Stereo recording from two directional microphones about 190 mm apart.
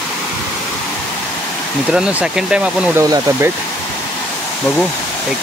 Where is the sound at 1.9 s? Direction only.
5° right (ahead or behind).